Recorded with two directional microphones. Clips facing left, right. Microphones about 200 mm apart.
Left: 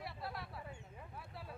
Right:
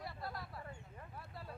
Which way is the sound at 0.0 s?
Centre (ahead or behind).